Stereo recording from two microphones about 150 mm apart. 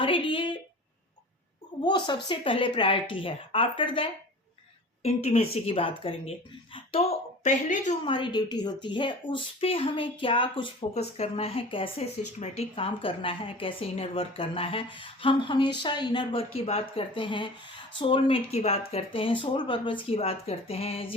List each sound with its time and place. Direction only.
0.0 s a sound: 35° left (ahead or behind)
1.8 s a woman's voice: 30° left (ahead or behind)
5.0 s a woman's voice: 45° left (ahead or behind)
8.0 s a woman's voice: 35° left (ahead or behind)
10.9 s a woman's voice: 45° left (ahead or behind)